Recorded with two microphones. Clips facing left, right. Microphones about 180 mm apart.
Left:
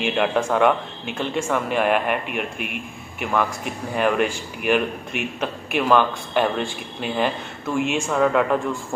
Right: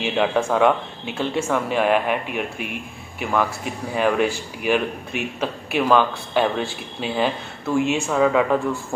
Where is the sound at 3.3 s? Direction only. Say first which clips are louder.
Right 1 dB; centre (ahead or behind).